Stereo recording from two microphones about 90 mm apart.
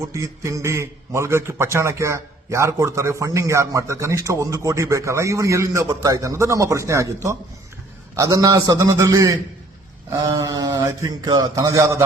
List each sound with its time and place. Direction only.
0.0 s a man's voice: 35° right (ahead or behind)